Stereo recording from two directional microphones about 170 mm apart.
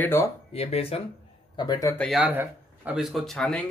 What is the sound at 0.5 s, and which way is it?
Speech, 35° left (ahead or behind).